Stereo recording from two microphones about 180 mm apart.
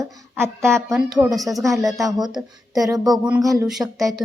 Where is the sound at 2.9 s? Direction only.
20° right (ahead or behind).